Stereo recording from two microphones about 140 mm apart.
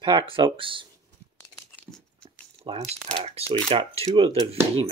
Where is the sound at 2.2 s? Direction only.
40° right (ahead or behind).